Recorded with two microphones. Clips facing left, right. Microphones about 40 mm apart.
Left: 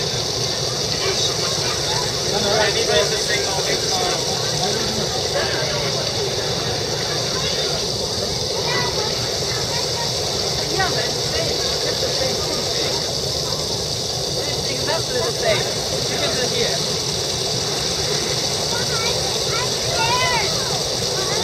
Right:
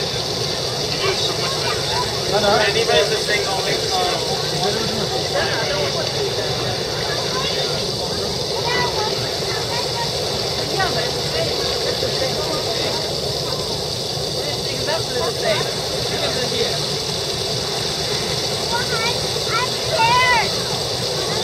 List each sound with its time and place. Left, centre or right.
2.3 s speech: centre
19.5 s vehicle: centre